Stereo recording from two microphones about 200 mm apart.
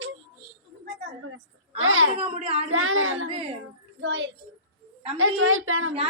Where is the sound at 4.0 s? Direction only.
65° right (ahead or behind).